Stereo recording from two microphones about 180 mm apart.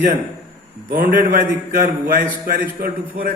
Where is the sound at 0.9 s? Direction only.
50° right (ahead or behind).